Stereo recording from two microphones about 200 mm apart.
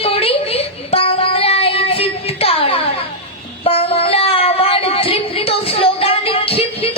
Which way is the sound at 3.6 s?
30° left (ahead or behind).